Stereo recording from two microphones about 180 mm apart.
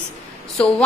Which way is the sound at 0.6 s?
5° left (ahead or behind).